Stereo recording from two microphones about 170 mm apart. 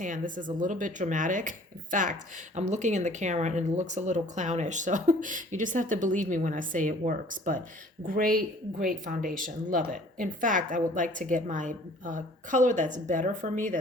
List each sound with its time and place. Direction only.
0.0 s speech: 50° right (ahead or behind)